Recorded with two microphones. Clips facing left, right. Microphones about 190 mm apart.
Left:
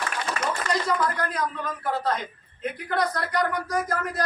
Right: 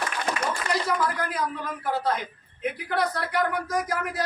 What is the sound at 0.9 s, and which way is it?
Speech, 5° right (ahead or behind).